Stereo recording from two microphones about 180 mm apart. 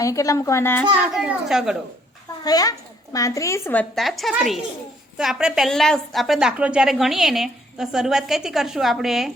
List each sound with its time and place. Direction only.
0.0 s a woman's voice: 20° left (ahead or behind)
1.1 s a woman's voice: 5° right (ahead or behind)
2.4 s a woman's voice: 20° left (ahead or behind); by 9.3 s centre (ahead or behind)